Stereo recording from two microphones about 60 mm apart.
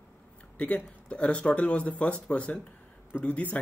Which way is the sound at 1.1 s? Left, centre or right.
Centre.